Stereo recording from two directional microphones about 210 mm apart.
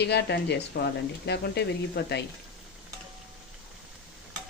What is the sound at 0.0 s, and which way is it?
Speech, 55° left (ahead or behind).